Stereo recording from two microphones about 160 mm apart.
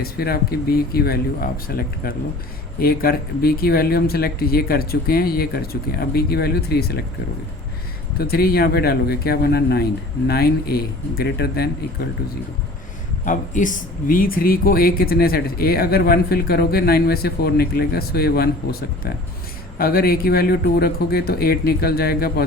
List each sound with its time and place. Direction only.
0.0 s speech: 75° left (ahead or behind)
8.2 s speech: 70° left (ahead or behind)
13.2 s speech: 55° left (ahead or behind); by 22.4 s 75° left (ahead or behind)